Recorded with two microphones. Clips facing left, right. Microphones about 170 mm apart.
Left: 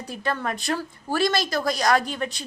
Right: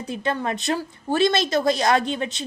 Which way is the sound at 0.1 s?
20° right (ahead or behind).